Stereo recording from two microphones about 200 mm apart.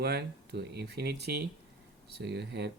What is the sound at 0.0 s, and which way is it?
Speech, 55° right (ahead or behind).